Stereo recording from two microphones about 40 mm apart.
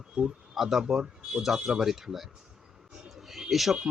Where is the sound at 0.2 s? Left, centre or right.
Right.